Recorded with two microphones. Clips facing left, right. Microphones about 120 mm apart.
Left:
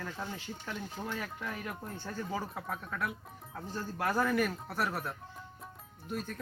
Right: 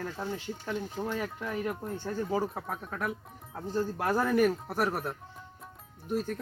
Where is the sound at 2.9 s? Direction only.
40° right (ahead or behind).